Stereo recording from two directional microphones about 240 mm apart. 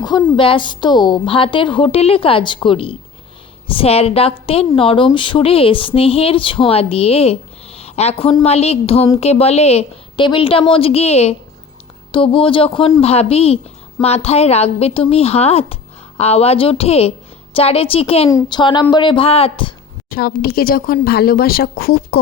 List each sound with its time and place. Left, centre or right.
0.0 s a woman's voice: centre
20.1 s speech: left